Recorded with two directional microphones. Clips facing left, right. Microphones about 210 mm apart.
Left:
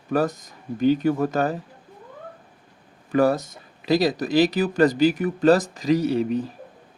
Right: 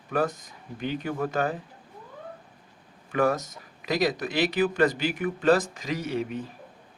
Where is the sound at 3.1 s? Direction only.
35° left (ahead or behind).